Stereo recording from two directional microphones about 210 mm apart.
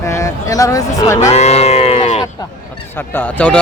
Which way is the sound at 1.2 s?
30° left (ahead or behind).